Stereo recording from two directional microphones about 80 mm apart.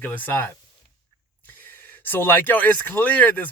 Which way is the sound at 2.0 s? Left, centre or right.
Left.